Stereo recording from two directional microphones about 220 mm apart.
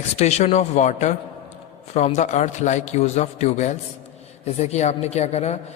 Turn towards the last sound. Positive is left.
turn(degrees=30)  # may be behind; listen again after turning